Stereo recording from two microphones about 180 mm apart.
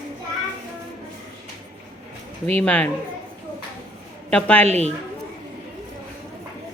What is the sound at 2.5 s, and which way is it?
Speech, 10° left (ahead or behind).